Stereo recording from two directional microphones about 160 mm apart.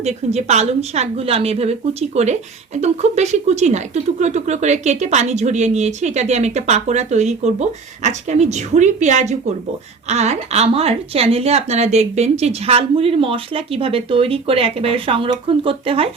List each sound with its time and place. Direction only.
0.0 s a woman's voice: 45° right (ahead or behind)